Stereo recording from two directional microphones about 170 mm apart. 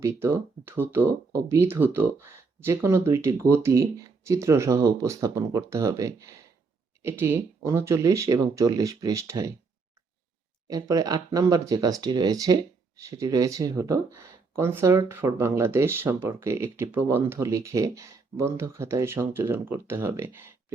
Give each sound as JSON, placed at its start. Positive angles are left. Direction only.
{"t": 0.0, "sound": "speech", "side_deg": -15}
{"t": 10.7, "sound": "speech", "side_deg": -20}